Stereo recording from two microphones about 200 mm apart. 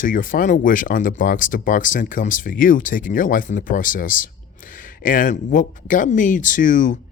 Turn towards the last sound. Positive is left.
turn(degrees=40)  # may be behind; listen again after turning